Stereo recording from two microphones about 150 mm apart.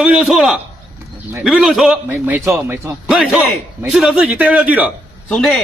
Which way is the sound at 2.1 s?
15° right (ahead or behind).